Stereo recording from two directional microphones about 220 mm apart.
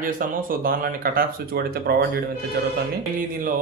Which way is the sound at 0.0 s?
40° right (ahead or behind).